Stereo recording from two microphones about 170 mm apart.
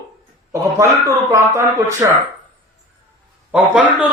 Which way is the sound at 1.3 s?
15° right (ahead or behind).